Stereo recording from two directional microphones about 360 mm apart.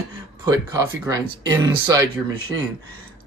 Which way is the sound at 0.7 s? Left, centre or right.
Centre.